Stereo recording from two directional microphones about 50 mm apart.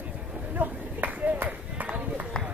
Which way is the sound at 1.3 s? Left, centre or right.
Right.